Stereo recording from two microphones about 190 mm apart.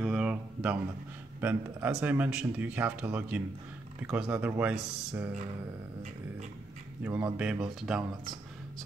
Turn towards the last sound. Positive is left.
turn(degrees=-5)  # may be behind; listen again after turning